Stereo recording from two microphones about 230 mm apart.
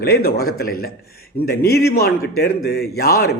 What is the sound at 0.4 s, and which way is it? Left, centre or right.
A man's voice, left.